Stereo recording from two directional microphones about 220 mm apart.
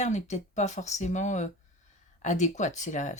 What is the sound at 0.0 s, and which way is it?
Speech, 30° left (ahead or behind).